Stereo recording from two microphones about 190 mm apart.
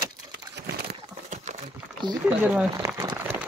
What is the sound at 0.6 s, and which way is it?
Horse, 55° right (ahead or behind).